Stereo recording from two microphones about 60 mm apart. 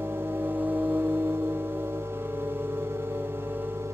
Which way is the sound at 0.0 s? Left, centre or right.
Right.